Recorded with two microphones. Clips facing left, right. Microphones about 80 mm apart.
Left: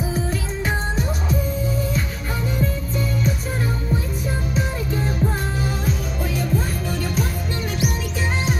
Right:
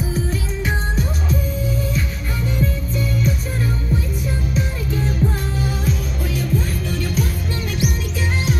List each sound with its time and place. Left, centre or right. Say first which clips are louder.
4.6 s music: even; left
5.9 s music: right 1 dB; left